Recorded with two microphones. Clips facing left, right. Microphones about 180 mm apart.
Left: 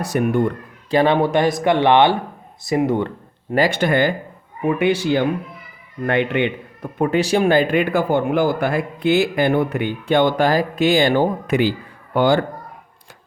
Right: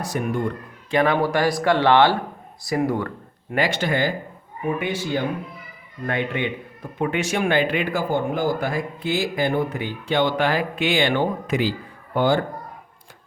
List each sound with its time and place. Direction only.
0.0 s speech: 65° left (ahead or behind)
0.9 s speech: 30° left (ahead or behind)
3.7 s speech: 55° left (ahead or behind)
4.6 s speech: 80° left
7.0 s speech: 35° left (ahead or behind)
11.4 s speech: 60° left (ahead or behind)
12.1 s speech: 80° left